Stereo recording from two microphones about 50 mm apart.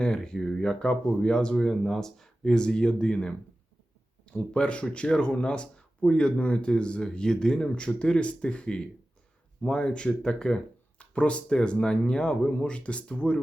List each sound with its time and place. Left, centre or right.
0.0 s speech: centre
4.5 s speech: left